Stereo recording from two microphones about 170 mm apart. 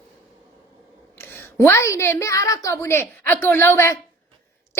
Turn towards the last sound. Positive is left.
turn(degrees=15)  # may be behind; listen again after turning